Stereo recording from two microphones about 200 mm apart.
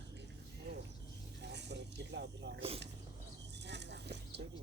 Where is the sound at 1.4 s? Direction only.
60° right (ahead or behind).